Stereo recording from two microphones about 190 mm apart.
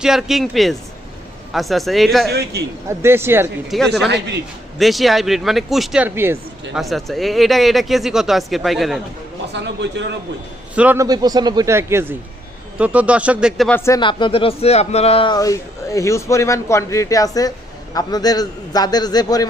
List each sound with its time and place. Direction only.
0.0 s speech: 5° right (ahead or behind)
2.3 s a man's voice: 60° right (ahead or behind)
3.0 s speech: 10° right (ahead or behind)
3.7 s speech: centre (ahead or behind)
6.7 s speech: centre (ahead or behind)
9.5 s a man's voice: 70° right (ahead or behind)
10.8 s speech: 10° right (ahead or behind)
11.0 s speech: 20° right (ahead or behind)
13.7 s speech: 15° left (ahead or behind)
14.0 s speech: 25° left (ahead or behind)